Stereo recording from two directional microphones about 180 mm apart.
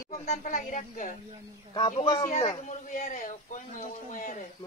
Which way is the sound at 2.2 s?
40° left (ahead or behind).